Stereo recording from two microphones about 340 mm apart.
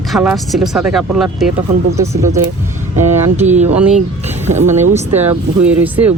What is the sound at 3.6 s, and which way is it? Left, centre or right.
Speech, centre.